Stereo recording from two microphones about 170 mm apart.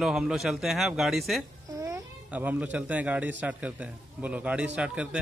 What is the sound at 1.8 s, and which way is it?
Babbling, 20° right (ahead or behind).